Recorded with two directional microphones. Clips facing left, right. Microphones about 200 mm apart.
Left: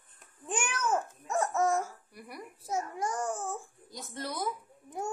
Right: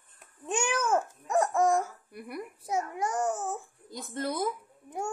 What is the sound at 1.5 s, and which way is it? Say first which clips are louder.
Laughter: right 2 dB; 15° right (ahead or behind).